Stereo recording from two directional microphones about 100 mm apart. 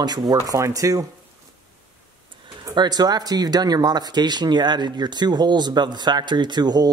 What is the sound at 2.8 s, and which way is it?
Speech, 45° right (ahead or behind).